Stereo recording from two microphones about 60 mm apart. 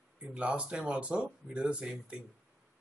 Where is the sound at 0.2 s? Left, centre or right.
Right.